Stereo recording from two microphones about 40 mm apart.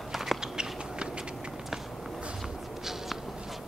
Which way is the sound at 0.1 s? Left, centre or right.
Centre.